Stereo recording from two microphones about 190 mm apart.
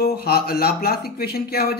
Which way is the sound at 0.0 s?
55° left (ahead or behind).